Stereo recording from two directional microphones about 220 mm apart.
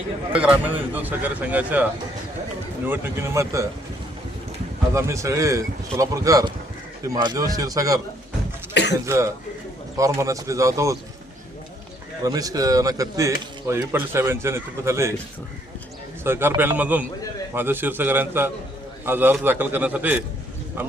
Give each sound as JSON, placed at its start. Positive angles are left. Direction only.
{"t": 0.3, "sound": "speech", "side_deg": -5}
{"t": 4.9, "sound": "speech", "side_deg": -15}
{"t": 8.7, "sound": "speech", "side_deg": 50}
{"t": 9.0, "sound": "speech", "side_deg": -15}
{"t": 12.2, "sound": "speech", "side_deg": -15}
{"t": 16.2, "sound": "speech", "side_deg": -10}